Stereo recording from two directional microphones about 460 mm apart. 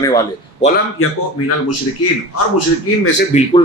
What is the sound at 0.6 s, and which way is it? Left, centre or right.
Speech, centre.